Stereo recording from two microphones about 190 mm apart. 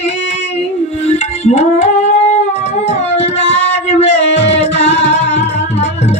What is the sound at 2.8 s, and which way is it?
Howl, 35° left (ahead or behind).